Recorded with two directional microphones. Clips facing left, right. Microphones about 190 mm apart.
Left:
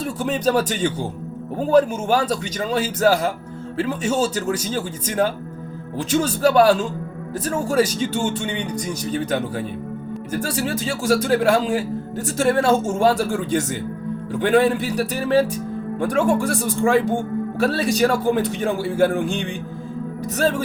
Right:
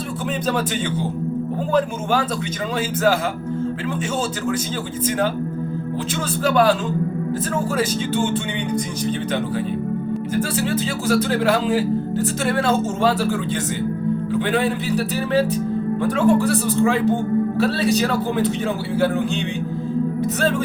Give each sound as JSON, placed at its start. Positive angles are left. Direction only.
{"t": 0.4, "sound": "speech", "side_deg": 40}
{"t": 6.4, "sound": "speech", "side_deg": 40}
{"t": 10.3, "sound": "speech", "side_deg": 45}